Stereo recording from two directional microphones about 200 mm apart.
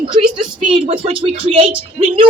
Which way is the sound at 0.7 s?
30° right (ahead or behind).